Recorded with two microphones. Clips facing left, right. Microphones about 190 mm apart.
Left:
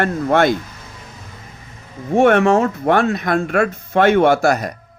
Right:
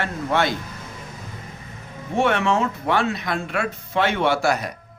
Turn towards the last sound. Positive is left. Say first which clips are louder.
# left 6 dB
turn(degrees=45)  # may be behind; listen again after turning